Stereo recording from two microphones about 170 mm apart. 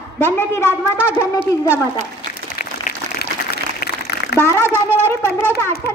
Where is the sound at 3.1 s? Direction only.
70° left (ahead or behind).